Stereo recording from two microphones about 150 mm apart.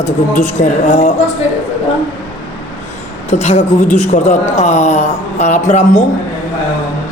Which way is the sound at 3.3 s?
50° left (ahead or behind).